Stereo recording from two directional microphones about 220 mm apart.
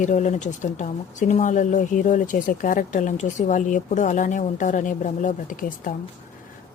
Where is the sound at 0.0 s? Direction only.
35° left (ahead or behind).